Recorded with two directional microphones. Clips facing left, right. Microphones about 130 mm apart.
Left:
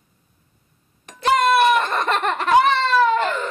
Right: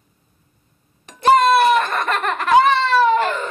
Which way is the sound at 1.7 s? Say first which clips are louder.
Right 1 dB; 20° left (ahead or behind).